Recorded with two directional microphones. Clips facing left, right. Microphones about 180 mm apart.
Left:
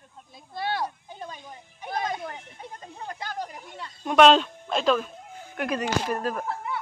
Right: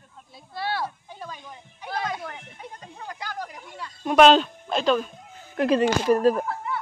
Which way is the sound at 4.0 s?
Centre (ahead or behind).